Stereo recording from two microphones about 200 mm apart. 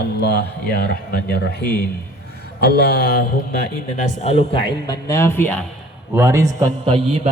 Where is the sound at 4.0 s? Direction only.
35° left (ahead or behind); by 5.6 s 10° left (ahead or behind).